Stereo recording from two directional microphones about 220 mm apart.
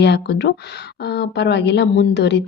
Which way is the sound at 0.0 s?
50° left (ahead or behind).